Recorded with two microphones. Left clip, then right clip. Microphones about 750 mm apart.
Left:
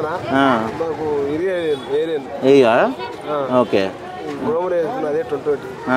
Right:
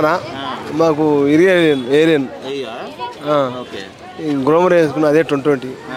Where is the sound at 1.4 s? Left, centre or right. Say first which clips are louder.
Right 8 dB; right.